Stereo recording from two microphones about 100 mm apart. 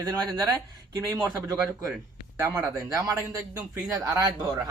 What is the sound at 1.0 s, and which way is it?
Speech, 30° right (ahead or behind).